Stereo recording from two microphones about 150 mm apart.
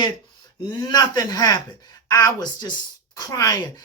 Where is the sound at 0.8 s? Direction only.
30° left (ahead or behind).